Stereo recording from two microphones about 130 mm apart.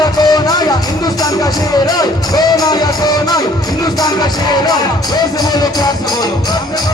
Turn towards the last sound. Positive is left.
turn(degrees=30)  # may be behind; listen again after turning